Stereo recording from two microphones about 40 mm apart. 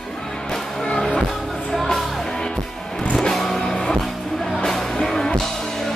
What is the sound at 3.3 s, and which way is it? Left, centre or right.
Music, centre.